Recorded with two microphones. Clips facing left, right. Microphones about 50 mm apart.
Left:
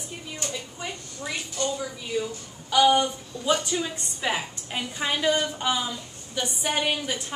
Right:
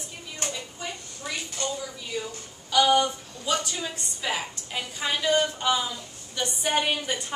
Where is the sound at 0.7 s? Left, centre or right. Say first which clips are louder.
Left 1 dB; centre.